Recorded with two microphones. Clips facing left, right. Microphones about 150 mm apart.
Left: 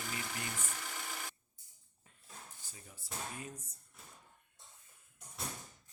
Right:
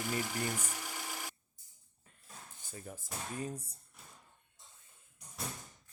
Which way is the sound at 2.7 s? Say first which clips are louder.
Right 10 dB; 50° right (ahead or behind).